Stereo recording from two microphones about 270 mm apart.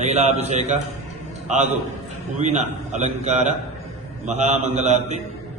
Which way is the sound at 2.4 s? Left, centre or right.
Right.